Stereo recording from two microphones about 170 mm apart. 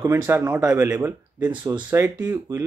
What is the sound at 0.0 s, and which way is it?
Speech, 15° right (ahead or behind).